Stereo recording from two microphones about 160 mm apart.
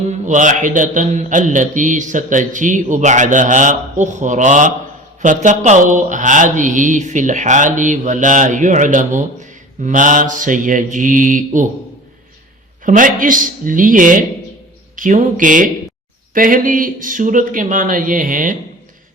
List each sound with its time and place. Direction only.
0.3 s a man's voice: 50° right (ahead or behind)
12.8 s speech: 55° right (ahead or behind)